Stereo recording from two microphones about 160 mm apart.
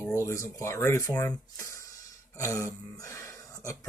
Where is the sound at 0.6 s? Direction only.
15° left (ahead or behind).